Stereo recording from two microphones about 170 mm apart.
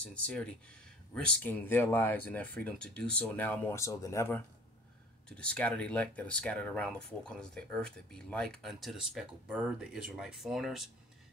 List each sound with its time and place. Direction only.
0.0 s speech: 5° left (ahead or behind)